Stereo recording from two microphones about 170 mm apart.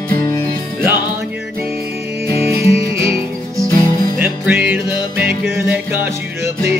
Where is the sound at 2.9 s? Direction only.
15° right (ahead or behind).